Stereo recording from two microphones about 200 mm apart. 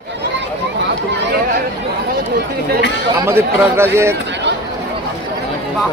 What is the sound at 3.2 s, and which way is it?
Speech, 10° right (ahead or behind).